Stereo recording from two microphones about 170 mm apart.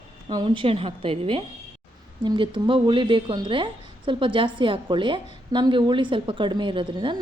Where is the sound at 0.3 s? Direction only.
30° right (ahead or behind).